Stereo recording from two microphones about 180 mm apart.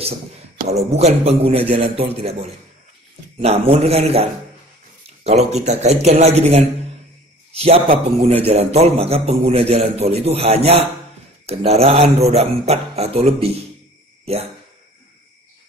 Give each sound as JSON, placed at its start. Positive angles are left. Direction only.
{"t": 0.7, "sound": "a man's voice", "side_deg": -35}
{"t": 3.3, "sound": "a man's voice", "side_deg": -35}